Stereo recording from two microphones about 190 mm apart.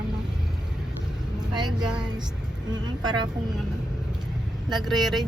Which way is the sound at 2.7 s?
20° right (ahead or behind).